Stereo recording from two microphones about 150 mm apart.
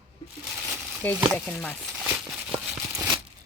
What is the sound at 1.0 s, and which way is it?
Speech, 10° left (ahead or behind).